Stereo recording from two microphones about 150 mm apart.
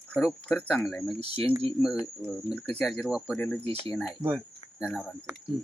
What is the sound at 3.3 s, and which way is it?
Speech, 10° left (ahead or behind).